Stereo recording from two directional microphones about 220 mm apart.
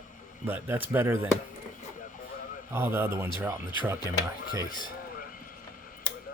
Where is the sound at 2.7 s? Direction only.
10° right (ahead or behind).